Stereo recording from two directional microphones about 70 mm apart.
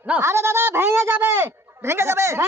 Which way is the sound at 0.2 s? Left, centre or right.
Right.